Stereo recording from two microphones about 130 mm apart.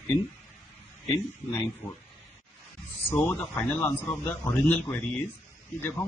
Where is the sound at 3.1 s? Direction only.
15° left (ahead or behind).